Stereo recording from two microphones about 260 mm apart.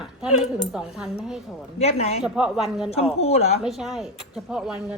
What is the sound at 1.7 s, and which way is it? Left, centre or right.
Speech, left.